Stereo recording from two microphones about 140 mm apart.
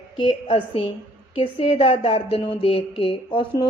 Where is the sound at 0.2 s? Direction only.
35° left (ahead or behind).